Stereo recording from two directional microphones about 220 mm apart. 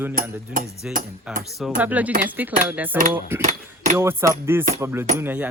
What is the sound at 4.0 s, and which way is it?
Speech, 10° right (ahead or behind).